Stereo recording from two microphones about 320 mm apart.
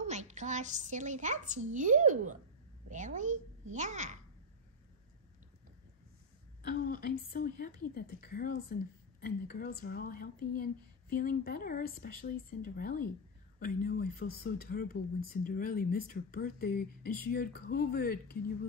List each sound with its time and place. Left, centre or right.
0.0 s a woman's voice: right
6.6 s a woman's voice: left